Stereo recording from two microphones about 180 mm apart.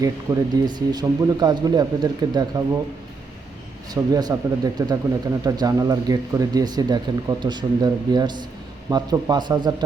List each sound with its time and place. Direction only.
0.0 s speech: 20° right (ahead or behind)
3.9 s speech: 20° right (ahead or behind)